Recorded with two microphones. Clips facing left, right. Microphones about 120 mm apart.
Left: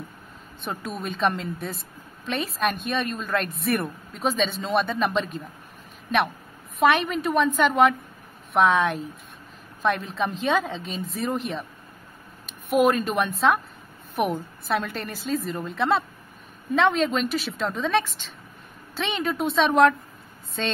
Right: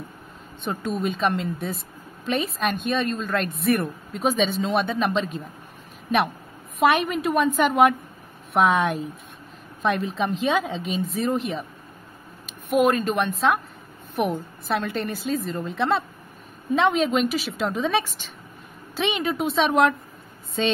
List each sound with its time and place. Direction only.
0.7 s a woman's voice: centre (ahead or behind)
6.9 s a woman's voice: 5° right (ahead or behind)
7.5 s a woman's voice: 15° right (ahead or behind)
12.7 s a woman's voice: centre (ahead or behind)
16.7 s a woman's voice: 10° right (ahead or behind)
19.2 s a woman's voice: centre (ahead or behind)